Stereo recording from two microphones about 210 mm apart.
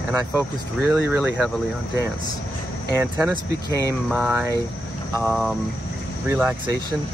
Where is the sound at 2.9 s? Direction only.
10° right (ahead or behind).